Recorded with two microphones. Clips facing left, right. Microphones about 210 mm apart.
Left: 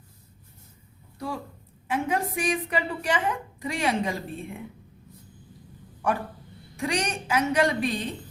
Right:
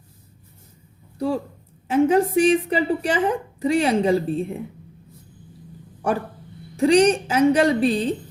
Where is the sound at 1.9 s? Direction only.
30° right (ahead or behind).